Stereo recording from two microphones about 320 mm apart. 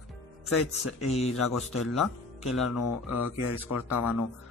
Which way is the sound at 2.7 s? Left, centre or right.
Left.